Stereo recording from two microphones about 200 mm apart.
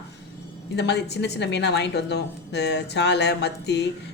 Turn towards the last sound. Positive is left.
turn(degrees=55)  # may be behind; listen again after turning